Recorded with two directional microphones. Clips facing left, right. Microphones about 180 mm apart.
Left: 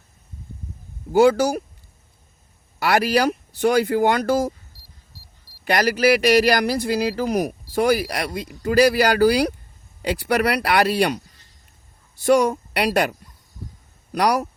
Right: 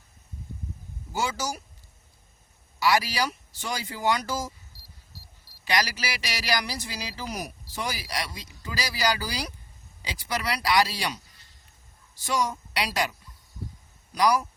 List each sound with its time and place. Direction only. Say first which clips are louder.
1.1 s speech: left 15 dB; 60° left (ahead or behind)
2.7 s speech: left 6 dB; 55° left (ahead or behind)
5.6 s speech: left 11 dB; 55° left (ahead or behind)
12.2 s speech: left 11 dB; 55° left (ahead or behind)